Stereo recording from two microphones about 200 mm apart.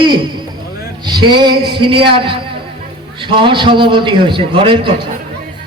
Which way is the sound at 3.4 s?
25° right (ahead or behind).